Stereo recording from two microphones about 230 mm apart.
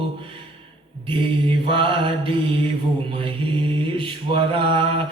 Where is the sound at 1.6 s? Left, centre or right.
Right.